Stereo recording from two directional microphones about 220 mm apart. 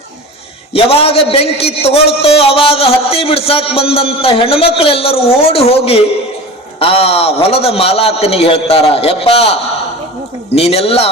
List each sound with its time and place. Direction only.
0.7 s a man's voice: 25° left (ahead or behind)